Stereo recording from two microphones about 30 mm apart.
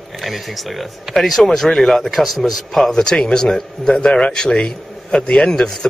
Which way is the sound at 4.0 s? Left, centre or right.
Left.